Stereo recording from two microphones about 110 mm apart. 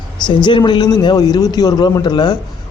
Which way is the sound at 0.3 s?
45° left (ahead or behind).